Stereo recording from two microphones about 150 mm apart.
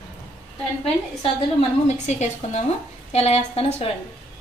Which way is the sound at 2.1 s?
50° left (ahead or behind).